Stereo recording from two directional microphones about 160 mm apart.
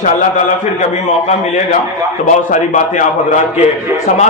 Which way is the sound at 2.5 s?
50° left (ahead or behind).